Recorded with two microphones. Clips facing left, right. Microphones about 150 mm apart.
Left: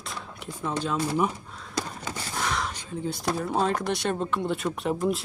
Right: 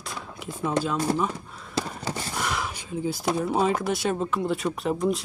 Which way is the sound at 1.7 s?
30° right (ahead or behind).